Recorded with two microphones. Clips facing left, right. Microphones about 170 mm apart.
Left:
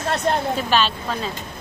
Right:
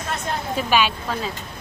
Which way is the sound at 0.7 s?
10° right (ahead or behind).